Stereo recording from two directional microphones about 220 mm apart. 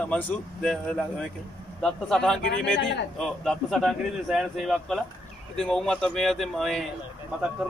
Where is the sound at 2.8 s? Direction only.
55° left (ahead or behind).